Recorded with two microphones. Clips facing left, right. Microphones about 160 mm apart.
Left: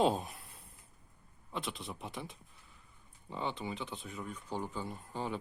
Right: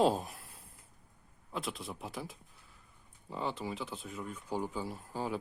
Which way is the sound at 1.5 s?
Centre (ahead or behind).